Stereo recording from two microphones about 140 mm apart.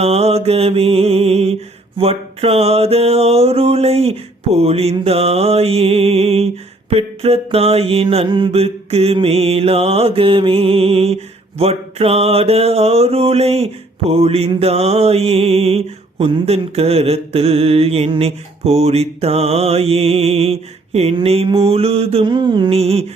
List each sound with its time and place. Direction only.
0.0 s mantra: 50° right (ahead or behind)